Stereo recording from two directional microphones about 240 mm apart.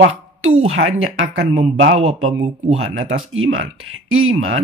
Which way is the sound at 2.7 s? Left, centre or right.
Right.